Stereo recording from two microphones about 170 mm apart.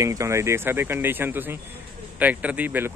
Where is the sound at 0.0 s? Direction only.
20° right (ahead or behind).